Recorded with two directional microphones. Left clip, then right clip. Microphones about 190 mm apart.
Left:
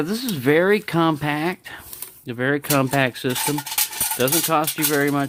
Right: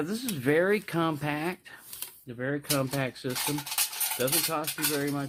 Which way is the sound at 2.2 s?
60° left (ahead or behind).